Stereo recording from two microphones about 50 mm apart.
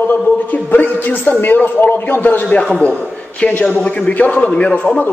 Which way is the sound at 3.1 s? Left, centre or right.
Left.